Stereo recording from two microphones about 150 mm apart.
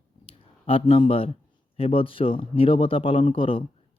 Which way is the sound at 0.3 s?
40° left (ahead or behind).